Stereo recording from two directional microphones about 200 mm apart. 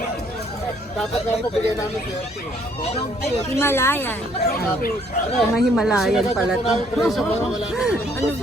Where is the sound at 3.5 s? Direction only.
10° left (ahead or behind).